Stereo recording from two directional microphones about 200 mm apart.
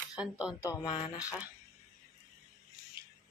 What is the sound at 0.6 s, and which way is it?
Speech, 15° left (ahead or behind).